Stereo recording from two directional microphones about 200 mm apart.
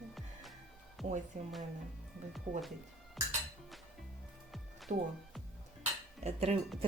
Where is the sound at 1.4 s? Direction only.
35° right (ahead or behind).